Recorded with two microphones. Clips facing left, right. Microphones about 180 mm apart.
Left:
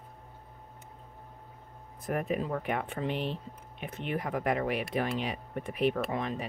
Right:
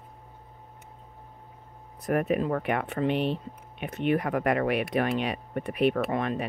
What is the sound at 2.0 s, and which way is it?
Speech, 70° right (ahead or behind).